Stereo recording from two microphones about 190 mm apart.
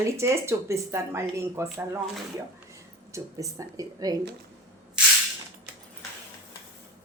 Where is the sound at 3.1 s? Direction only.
15° right (ahead or behind).